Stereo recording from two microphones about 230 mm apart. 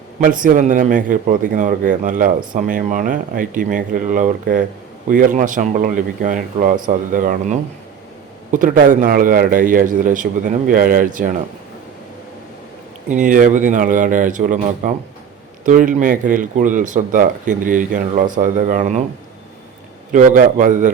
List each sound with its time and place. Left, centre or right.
0.2 s a man's voice: right
13.1 s a man's voice: right
20.1 s a man's voice: right